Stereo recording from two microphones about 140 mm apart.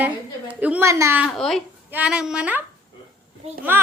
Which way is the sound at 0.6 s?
10° right (ahead or behind).